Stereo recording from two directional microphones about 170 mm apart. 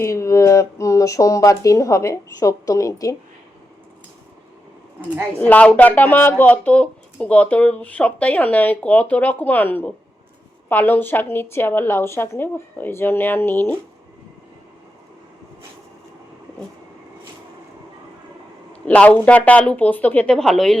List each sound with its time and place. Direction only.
0.0 s speech: 15° left (ahead or behind)
5.4 s speech: 10° left (ahead or behind)
18.7 s speech: 5° left (ahead or behind)